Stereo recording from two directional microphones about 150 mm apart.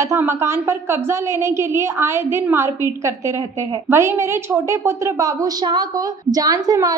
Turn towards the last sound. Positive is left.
turn(degrees=-25)  # may be behind; listen again after turning